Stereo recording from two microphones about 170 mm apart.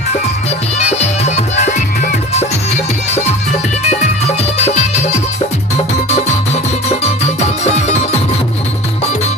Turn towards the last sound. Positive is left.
turn(degrees=40)  # may be behind; listen again after turning